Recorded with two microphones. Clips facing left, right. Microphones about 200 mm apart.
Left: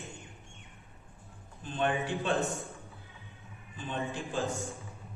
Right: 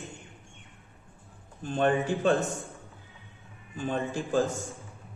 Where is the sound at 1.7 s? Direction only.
40° right (ahead or behind).